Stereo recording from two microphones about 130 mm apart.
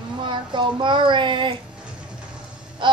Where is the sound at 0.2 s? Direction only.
35° right (ahead or behind).